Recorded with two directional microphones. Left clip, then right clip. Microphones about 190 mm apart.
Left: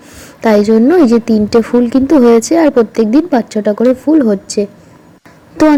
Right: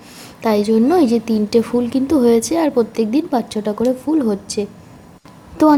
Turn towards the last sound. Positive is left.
turn(degrees=25)  # may be behind; listen again after turning